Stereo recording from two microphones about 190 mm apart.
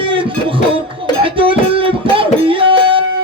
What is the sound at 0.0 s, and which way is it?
Music, 25° right (ahead or behind).